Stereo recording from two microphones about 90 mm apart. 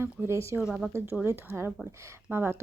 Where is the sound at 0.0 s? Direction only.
30° right (ahead or behind).